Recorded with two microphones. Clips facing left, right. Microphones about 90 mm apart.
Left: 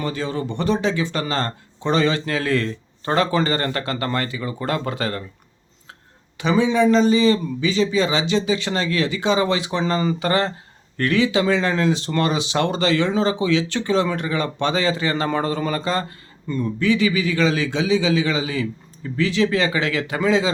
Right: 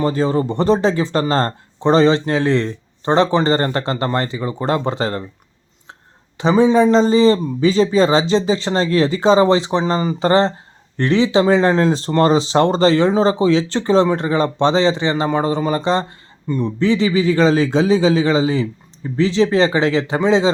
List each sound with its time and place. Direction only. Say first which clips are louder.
0.0 s speech: right 8 dB; 35° right (ahead or behind)